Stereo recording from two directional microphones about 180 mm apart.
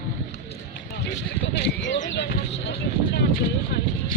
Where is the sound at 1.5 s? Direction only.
70° left (ahead or behind).